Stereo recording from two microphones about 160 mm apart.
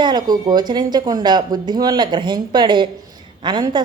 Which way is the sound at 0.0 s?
25° right (ahead or behind).